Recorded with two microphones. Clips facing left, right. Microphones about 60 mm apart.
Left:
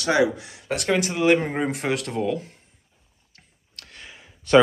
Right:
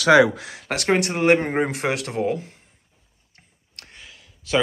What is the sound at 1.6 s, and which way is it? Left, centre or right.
Speech, right.